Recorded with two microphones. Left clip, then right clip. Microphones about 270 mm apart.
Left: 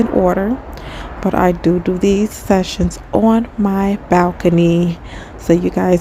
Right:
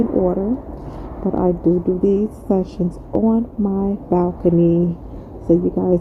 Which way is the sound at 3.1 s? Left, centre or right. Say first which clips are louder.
Left 5 dB; left.